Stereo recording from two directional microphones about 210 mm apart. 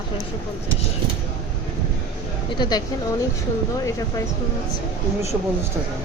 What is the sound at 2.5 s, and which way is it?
Speech, 20° left (ahead or behind).